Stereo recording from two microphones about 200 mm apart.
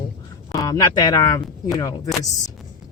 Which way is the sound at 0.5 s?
15° left (ahead or behind).